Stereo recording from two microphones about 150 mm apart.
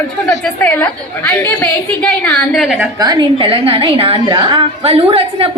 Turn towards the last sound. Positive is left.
turn(degrees=-40)  # may be behind; listen again after turning